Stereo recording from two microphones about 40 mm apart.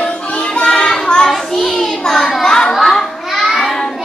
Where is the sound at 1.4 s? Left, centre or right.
Centre.